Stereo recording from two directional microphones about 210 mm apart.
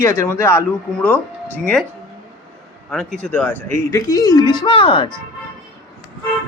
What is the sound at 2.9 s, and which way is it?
Speech, centre (ahead or behind).